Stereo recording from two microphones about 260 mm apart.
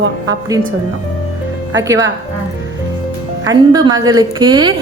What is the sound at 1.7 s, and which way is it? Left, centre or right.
Speech, centre.